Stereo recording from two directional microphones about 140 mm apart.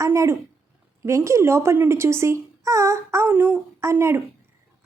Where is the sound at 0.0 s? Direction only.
20° right (ahead or behind).